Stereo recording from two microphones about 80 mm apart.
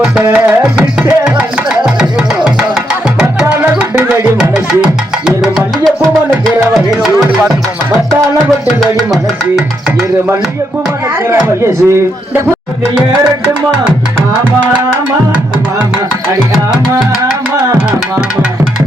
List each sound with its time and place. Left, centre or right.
0.3 s tabla: centre
1.2 s music: centre
3.7 s music: centre
5.8 s music: centre
11.4 s a man's voice: right